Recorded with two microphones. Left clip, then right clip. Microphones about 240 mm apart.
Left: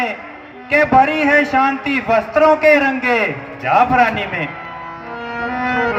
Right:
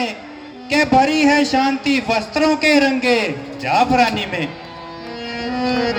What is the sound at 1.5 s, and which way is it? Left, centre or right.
A man's voice, right.